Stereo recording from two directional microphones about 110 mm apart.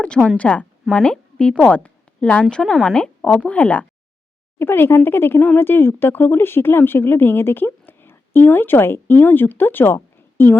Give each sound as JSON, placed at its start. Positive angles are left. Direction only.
{"t": 0.3, "sound": "a woman's voice", "side_deg": 10}